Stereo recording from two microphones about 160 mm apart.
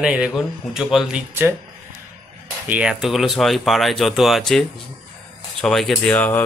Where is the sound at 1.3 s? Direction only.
15° right (ahead or behind).